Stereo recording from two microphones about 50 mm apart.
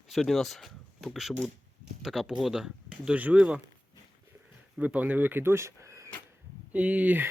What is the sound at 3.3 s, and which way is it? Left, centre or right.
Speech, right.